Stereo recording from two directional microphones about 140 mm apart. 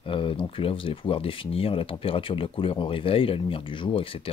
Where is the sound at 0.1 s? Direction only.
40° left (ahead or behind).